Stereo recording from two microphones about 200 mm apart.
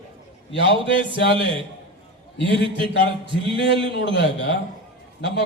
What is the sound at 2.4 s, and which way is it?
A man's voice, 60° left (ahead or behind).